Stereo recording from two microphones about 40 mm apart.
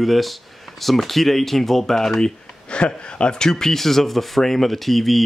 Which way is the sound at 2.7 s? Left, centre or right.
Left.